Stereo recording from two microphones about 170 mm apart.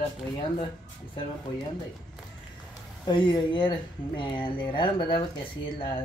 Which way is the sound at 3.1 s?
30° left (ahead or behind).